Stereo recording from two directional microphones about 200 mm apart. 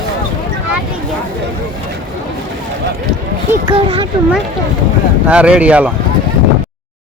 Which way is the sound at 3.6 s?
30° right (ahead or behind).